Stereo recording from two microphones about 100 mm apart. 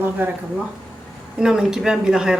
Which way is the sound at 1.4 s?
5° right (ahead or behind).